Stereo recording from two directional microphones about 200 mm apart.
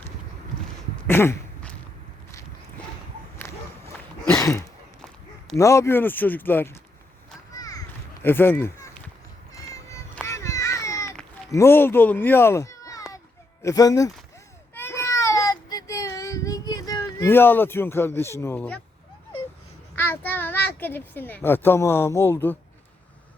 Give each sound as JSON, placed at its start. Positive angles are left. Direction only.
{"t": 0.9, "sound": "a sound", "side_deg": 10}
{"t": 3.4, "sound": "walk", "side_deg": 15}
{"t": 4.4, "sound": "a sound", "side_deg": 15}
{"t": 5.5, "sound": "a child's voice", "side_deg": 15}
{"t": 7.5, "sound": "a sound", "side_deg": 20}
{"t": 8.2, "sound": "speech", "side_deg": 10}
{"t": 9.9, "sound": "children playing", "side_deg": 15}
{"t": 11.5, "sound": "a child's voice", "side_deg": 10}
{"t": 14.8, "sound": "child singing", "side_deg": 10}
{"t": 20.0, "sound": "a child's voice", "side_deg": 10}